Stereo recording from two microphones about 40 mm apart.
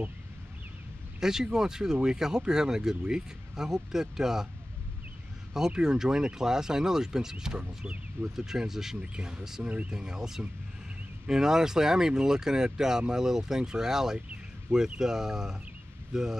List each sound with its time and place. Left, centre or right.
1.2 s speech: centre
5.7 s speech: centre
7.5 s speech: right
8.4 s speech: centre
9.0 s speech: right